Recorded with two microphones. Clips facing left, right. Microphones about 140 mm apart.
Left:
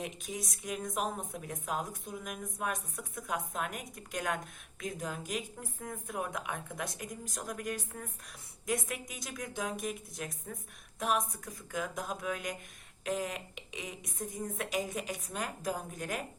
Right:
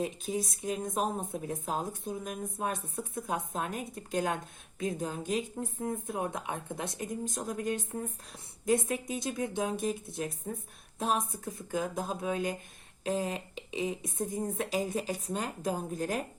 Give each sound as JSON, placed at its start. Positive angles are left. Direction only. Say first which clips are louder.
{"t": 0.0, "sound": "a woman's voice", "louder": "right 7 dB", "side_deg": -30}